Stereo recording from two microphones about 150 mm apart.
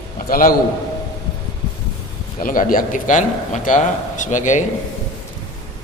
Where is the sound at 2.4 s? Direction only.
65° left (ahead or behind).